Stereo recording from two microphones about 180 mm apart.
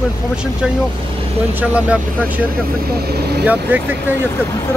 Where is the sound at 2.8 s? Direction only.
60° right (ahead or behind).